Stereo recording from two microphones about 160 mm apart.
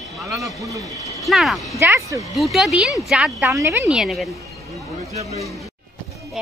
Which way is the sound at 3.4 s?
15° right (ahead or behind).